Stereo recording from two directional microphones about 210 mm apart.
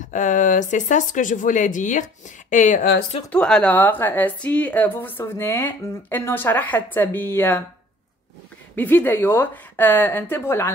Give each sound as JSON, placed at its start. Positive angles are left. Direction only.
{"t": 0.1, "sound": "speech", "side_deg": 35}
{"t": 3.3, "sound": "a woman's voice", "side_deg": 5}
{"t": 8.7, "sound": "a woman's voice", "side_deg": 10}